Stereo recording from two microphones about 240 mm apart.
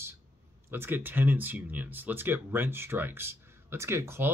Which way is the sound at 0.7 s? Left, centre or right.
Centre.